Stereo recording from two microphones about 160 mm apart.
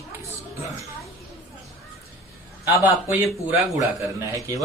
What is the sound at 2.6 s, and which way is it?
A man's voice, 15° right (ahead or behind).